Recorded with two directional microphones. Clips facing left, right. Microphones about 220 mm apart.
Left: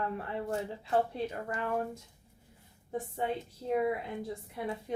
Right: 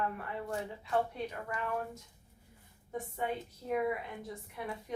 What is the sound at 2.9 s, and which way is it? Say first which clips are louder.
A woman's voice: left 3 dB; 30° left (ahead or behind).